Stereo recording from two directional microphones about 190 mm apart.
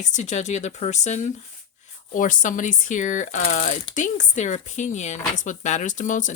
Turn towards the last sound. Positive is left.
turn(degrees=40)  # may be behind; listen again after turning